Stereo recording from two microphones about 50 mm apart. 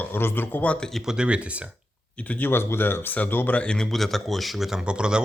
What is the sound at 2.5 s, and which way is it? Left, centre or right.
Speech, left.